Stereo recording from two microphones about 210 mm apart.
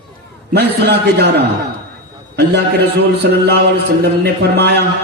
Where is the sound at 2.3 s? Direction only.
50° right (ahead or behind).